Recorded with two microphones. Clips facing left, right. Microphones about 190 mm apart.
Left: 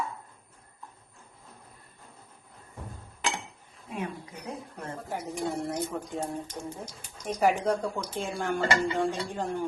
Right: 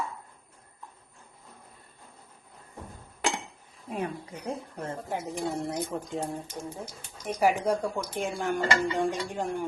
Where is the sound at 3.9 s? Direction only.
35° right (ahead or behind).